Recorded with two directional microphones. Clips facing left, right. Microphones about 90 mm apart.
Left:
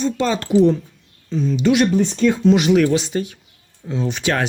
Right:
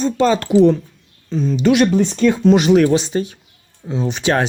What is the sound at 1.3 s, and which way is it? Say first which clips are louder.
Speech: right 2 dB; 40° right (ahead or behind).